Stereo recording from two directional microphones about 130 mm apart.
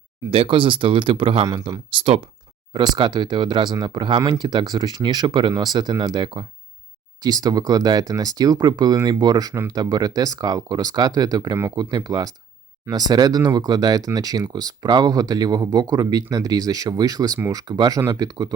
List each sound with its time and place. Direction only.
0.3 s speech: 40° right (ahead or behind)
7.2 s speech: 30° right (ahead or behind)